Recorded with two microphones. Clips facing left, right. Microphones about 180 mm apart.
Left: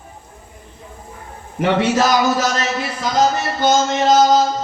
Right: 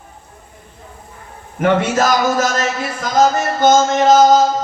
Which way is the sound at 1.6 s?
50° right (ahead or behind).